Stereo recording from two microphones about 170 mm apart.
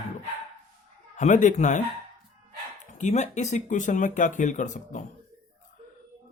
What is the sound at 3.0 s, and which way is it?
Speech, 45° left (ahead or behind).